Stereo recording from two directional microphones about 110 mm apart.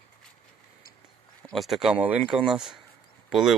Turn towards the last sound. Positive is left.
turn(degrees=-5)  # may be behind; listen again after turning